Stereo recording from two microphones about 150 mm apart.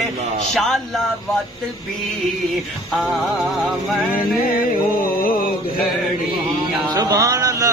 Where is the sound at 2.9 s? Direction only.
Centre (ahead or behind).